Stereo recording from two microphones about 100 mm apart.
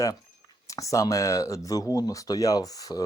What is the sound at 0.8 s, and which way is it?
Speech, 35° left (ahead or behind).